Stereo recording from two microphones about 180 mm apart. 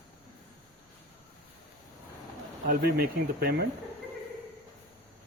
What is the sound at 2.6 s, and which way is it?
Speech, 55° right (ahead or behind).